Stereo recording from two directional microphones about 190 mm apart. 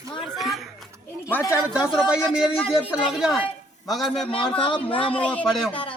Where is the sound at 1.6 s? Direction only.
5° right (ahead or behind).